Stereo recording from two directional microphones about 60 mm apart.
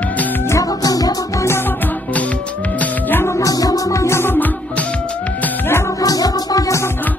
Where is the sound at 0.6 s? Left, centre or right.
Left.